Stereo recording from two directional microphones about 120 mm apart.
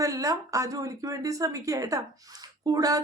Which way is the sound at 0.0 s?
30° right (ahead or behind).